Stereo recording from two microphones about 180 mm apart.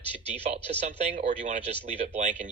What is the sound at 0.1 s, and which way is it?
Speech, 35° right (ahead or behind).